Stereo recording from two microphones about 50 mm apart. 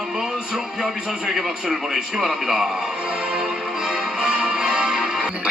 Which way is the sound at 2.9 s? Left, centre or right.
Centre.